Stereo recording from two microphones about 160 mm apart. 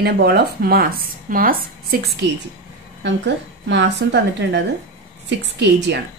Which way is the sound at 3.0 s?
90° right.